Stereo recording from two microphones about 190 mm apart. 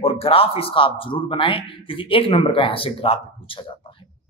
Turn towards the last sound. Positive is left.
turn(degrees=30)  # may be behind; listen again after turning